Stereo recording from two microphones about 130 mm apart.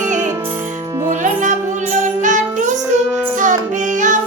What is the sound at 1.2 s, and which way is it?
Music, 70° right (ahead or behind).